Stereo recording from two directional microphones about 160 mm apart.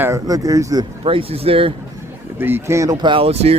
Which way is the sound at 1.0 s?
35° right (ahead or behind).